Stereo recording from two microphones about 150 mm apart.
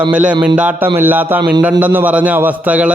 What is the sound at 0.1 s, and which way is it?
A man's voice, 10° right (ahead or behind).